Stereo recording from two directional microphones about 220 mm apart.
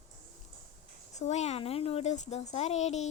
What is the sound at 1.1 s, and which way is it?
A woman's voice, 30° left (ahead or behind).